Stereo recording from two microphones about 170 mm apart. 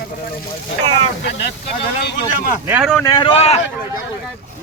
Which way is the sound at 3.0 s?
25° left (ahead or behind).